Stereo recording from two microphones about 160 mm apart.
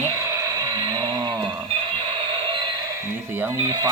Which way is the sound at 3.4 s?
15° right (ahead or behind).